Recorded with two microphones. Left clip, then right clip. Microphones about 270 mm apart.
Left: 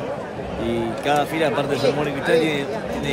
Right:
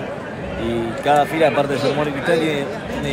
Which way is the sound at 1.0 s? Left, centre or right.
Centre.